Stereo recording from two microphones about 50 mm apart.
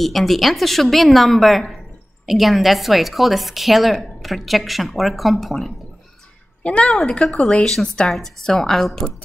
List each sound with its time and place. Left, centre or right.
0.0 s a woman's voice: centre
6.6 s a woman's voice: left
6.9 s a woman's voice: centre